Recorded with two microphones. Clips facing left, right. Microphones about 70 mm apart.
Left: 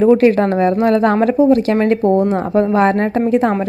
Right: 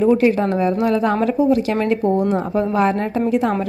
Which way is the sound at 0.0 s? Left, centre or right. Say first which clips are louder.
Left 4 dB; left.